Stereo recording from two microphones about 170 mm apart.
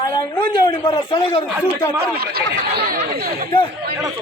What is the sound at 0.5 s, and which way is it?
Speech, 25° left (ahead or behind).